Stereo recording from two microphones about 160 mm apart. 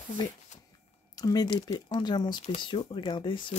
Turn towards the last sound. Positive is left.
turn(degrees=30)  # may be behind; listen again after turning